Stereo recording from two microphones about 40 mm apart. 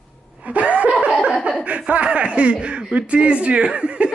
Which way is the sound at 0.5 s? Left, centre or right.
Right.